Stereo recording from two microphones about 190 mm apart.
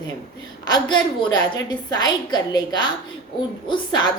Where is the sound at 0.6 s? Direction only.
25° left (ahead or behind).